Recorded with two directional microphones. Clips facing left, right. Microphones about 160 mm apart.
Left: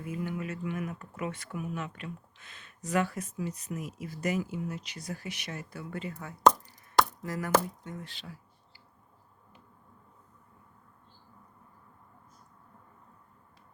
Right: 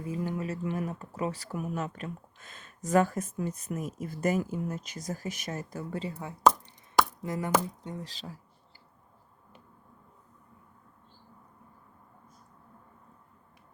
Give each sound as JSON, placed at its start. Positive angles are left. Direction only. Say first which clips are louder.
{"t": 0.0, "sound": "speech", "louder": "right 2 dB", "side_deg": -35}
{"t": 7.2, "sound": "chopping", "louder": "right 2 dB", "side_deg": -25}
{"t": 7.9, "sound": "speech", "louder": "right 3 dB", "side_deg": -35}